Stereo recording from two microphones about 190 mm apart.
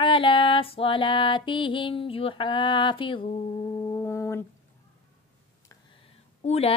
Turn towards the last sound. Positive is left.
turn(degrees=35)  # may be behind; listen again after turning